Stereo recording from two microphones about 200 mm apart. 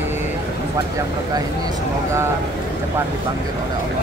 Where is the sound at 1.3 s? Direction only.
15° right (ahead or behind).